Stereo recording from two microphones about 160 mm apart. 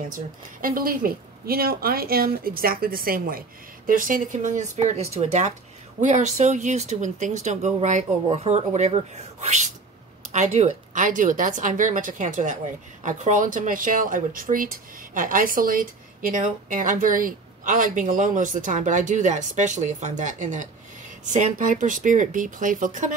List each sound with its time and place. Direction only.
0.1 s speech: 60° right (ahead or behind)